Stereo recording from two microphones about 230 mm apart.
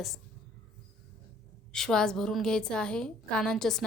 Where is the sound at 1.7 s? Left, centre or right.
Centre.